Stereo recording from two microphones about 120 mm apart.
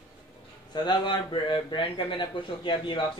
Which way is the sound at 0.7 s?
40° left (ahead or behind).